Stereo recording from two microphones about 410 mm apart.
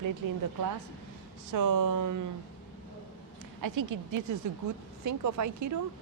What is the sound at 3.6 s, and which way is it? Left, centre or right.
Speech, right.